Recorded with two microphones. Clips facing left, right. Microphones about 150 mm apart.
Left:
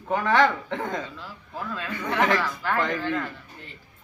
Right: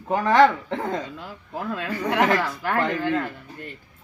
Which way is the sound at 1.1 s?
50° right (ahead or behind).